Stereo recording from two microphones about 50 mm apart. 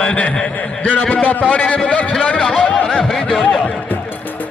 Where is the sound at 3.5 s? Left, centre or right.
Left.